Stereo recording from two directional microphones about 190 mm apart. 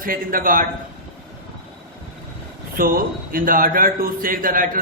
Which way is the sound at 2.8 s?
50° right (ahead or behind).